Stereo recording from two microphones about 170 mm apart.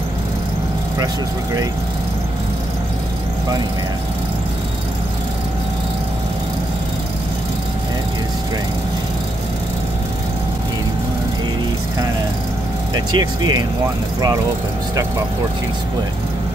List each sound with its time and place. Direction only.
12.9 s speech: 25° right (ahead or behind)